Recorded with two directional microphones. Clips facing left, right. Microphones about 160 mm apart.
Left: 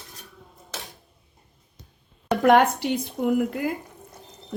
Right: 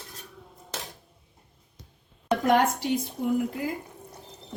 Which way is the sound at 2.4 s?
65° left (ahead or behind).